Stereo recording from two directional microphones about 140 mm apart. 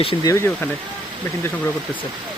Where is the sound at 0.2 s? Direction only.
25° left (ahead or behind).